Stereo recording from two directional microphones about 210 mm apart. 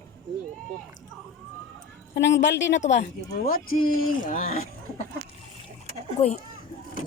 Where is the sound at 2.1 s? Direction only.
60° left (ahead or behind); by 4.6 s 40° left (ahead or behind).